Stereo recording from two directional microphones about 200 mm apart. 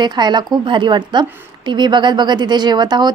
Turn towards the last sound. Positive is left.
turn(degrees=-20)  # may be behind; listen again after turning